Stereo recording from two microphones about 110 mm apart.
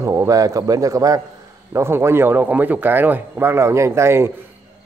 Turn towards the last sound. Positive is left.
turn(degrees=-25)  # may be behind; listen again after turning